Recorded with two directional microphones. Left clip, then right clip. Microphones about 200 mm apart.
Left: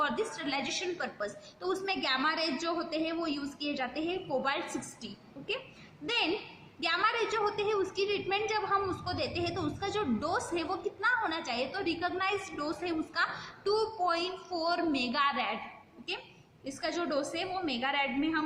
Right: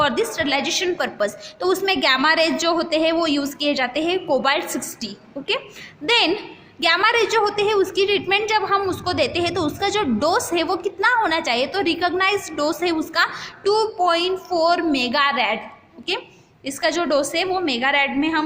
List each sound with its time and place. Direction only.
0.0 s a woman's voice: 50° right (ahead or behind)
6.1 s a woman's voice: 50° right (ahead or behind)
16.6 s a woman's voice: 50° right (ahead or behind)